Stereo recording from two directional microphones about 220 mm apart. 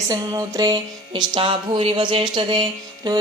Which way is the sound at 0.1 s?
15° right (ahead or behind).